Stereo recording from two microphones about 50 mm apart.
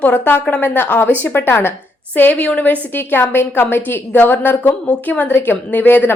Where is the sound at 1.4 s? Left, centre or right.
Left.